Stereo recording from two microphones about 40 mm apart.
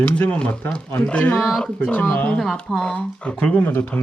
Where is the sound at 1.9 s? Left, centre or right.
Left.